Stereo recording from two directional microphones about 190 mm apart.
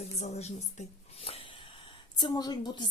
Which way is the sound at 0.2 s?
35° left (ahead or behind).